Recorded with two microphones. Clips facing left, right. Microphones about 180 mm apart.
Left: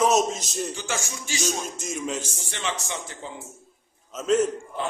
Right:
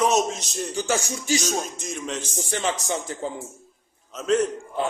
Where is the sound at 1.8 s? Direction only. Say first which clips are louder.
Left 1 dB; 5° left (ahead or behind).